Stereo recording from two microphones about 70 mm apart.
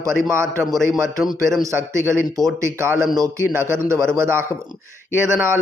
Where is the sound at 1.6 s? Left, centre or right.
Right.